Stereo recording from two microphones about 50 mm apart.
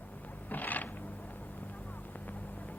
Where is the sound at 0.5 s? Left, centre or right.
Left.